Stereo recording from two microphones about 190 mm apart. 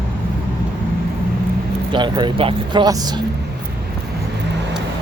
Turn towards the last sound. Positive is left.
turn(degrees=-20)  # may be behind; listen again after turning